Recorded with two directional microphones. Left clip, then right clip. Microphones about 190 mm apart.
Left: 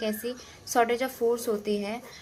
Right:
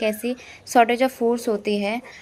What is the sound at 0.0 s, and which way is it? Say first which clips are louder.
A woman's voice: right 8 dB; 35° right (ahead or behind).